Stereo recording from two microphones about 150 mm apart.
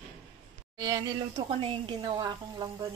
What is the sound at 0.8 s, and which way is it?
A woman's voice, 25° right (ahead or behind).